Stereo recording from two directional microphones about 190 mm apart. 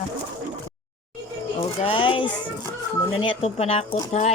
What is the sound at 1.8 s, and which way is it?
Music, 30° left (ahead or behind).